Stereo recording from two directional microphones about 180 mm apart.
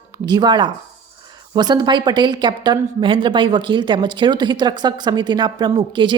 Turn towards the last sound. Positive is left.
turn(degrees=-25)  # may be behind; listen again after turning